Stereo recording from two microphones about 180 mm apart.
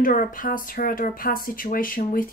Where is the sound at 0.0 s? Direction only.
50° left (ahead or behind).